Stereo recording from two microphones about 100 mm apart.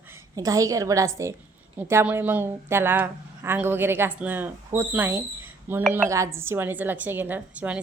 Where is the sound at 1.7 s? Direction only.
20° right (ahead or behind).